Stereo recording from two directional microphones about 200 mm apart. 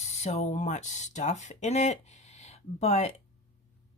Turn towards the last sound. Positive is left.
turn(degrees=35)  # may be behind; listen again after turning